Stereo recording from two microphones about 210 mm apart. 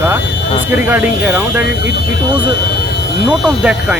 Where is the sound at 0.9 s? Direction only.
5° right (ahead or behind).